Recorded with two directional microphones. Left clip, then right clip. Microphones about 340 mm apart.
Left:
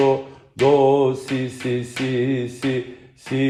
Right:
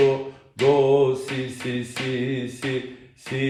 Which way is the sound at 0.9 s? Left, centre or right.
Left.